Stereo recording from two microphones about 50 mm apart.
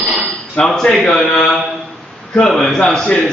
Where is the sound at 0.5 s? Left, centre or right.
Centre.